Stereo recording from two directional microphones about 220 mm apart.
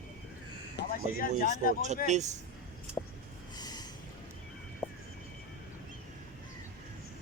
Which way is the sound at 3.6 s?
20° left (ahead or behind).